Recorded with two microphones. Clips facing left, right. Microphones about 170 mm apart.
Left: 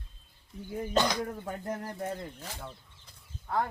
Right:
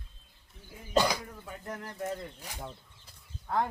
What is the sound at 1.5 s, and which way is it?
Speech, 40° left (ahead or behind).